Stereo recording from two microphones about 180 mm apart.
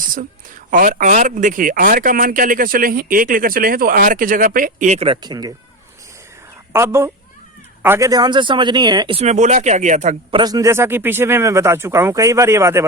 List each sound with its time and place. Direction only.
0.7 s a man's voice: 50° right (ahead or behind); by 5.5 s 20° right (ahead or behind)
6.7 s speech: 15° right (ahead or behind); by 10.2 s 40° right (ahead or behind)
10.3 s speech: 20° right (ahead or behind)